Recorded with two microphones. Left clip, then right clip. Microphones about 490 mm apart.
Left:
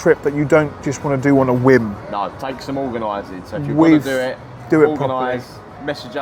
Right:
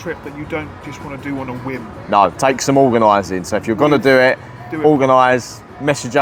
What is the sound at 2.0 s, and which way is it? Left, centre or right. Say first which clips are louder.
Speech: right 11 dB; right.